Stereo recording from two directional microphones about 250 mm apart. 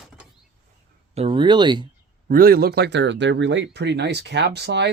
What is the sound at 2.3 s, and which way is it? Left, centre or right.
Speech, right.